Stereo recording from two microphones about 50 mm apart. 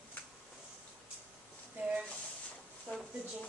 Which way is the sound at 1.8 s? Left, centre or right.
Right.